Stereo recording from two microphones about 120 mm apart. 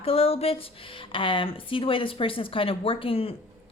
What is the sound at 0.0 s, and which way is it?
A woman's voice, 50° left (ahead or behind).